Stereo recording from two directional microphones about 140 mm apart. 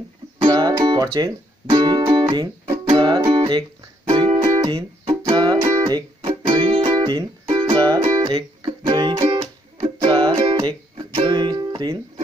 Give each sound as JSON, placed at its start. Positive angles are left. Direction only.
{"t": 0.5, "sound": "music", "side_deg": -30}
{"t": 4.4, "sound": "music", "side_deg": -25}
{"t": 11.0, "sound": "speech", "side_deg": -30}